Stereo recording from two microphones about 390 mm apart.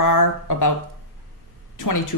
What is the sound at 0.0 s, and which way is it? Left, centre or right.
Speech, left.